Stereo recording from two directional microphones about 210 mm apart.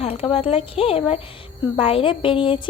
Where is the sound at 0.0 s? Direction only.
30° left (ahead or behind).